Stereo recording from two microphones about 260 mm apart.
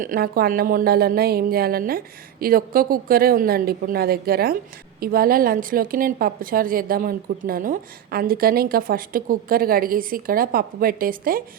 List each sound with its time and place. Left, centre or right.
0.0 s a woman's voice: right